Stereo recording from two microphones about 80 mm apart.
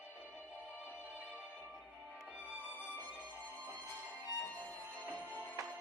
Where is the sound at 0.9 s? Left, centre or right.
Centre.